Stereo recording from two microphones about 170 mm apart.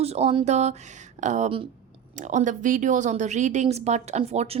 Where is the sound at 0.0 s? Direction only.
40° right (ahead or behind).